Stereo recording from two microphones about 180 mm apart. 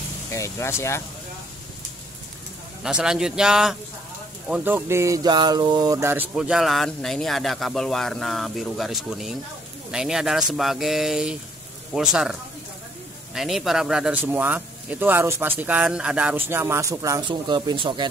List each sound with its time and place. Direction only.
0.3 s speech: 15° left (ahead or behind)
2.8 s speech: 5° right (ahead or behind)
6.3 s speech: 5° right (ahead or behind); by 18.0 s 25° right (ahead or behind)